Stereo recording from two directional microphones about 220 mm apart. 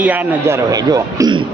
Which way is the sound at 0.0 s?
10° right (ahead or behind).